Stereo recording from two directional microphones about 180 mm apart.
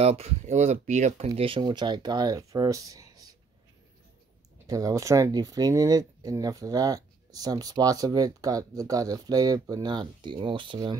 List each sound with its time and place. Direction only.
0.0 s speech: 35° right (ahead or behind); by 3.3 s 20° right (ahead or behind)
4.6 s speech: 20° right (ahead or behind)